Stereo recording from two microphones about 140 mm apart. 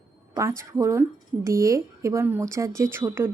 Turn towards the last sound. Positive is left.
turn(degrees=-15)  # may be behind; listen again after turning